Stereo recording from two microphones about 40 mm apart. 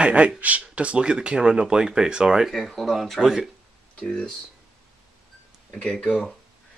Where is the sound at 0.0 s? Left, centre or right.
Right; by 2.5 s centre.